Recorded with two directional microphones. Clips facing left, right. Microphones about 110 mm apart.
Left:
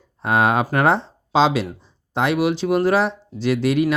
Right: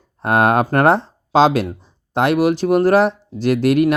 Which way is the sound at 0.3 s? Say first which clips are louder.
Right 3 dB; 55° right (ahead or behind).